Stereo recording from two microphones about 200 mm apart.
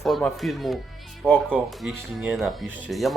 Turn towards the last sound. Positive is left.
turn(degrees=0)  # may be behind; listen again after turning